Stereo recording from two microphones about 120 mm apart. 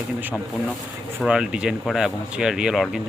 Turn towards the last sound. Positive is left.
turn(degrees=0)  # may be behind; listen again after turning